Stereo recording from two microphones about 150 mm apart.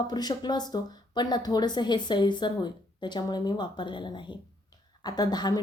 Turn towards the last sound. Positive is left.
turn(degrees=25)  # may be behind; listen again after turning